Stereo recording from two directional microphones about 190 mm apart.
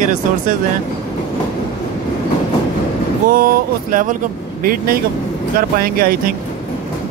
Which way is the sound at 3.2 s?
50° right (ahead or behind).